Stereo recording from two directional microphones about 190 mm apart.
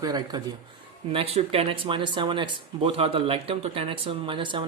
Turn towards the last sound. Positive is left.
turn(degrees=-25)  # may be behind; listen again after turning